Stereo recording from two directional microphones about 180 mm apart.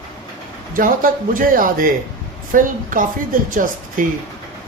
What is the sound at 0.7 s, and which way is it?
A man's voice, 50° right (ahead or behind).